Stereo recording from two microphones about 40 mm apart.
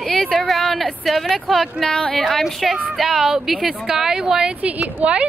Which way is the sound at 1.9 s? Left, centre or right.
Centre.